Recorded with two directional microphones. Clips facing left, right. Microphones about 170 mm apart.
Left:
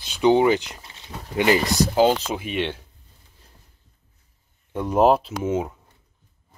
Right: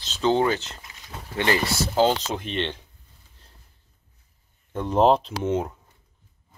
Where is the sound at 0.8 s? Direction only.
30° left (ahead or behind).